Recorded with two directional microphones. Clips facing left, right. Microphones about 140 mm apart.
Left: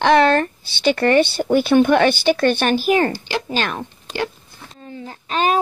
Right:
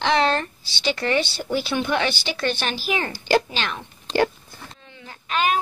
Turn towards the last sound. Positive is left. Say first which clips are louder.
# left 4 dB
turn(degrees=35)  # may be behind; listen again after turning